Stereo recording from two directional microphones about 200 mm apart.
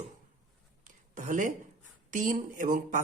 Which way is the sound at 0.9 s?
40° right (ahead or behind).